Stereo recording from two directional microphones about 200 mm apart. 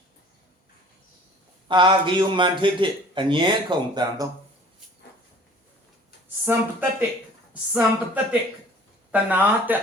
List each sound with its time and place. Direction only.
1.6 s a man's voice: 25° right (ahead or behind)
6.4 s speech: 10° right (ahead or behind)